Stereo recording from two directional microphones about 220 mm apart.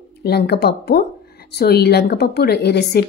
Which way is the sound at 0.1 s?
45° left (ahead or behind).